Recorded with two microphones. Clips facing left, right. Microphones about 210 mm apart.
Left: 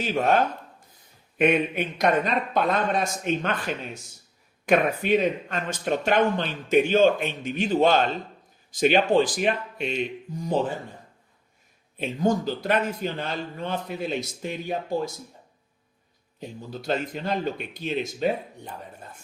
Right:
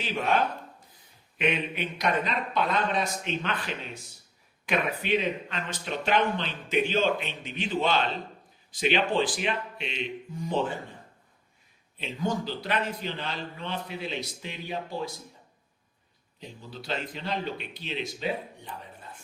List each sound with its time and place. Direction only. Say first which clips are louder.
0.0 s speech: left 5 dB; 45° left (ahead or behind)
11.9 s speech: left 6 dB; 45° left (ahead or behind)
16.4 s speech: left 6 dB; 45° left (ahead or behind)